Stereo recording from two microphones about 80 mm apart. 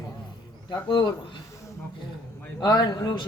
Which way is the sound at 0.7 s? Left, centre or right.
Left.